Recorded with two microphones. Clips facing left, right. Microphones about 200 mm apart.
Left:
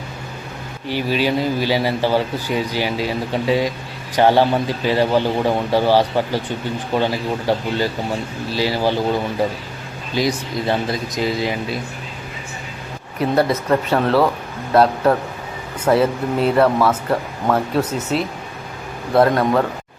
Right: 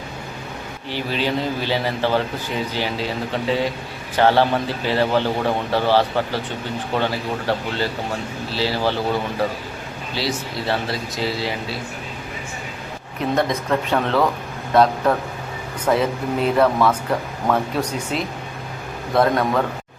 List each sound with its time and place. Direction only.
0.9 s speech: 10° left (ahead or behind)
10.2 s speech: 15° left (ahead or behind)
13.3 s speech: 5° left (ahead or behind)